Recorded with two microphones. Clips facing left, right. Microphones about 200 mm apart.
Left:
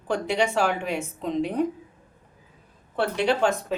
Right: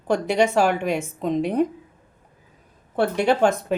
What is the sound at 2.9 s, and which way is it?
Speech, 50° right (ahead or behind).